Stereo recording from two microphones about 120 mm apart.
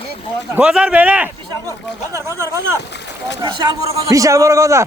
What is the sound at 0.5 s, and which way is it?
Speech, 10° right (ahead or behind).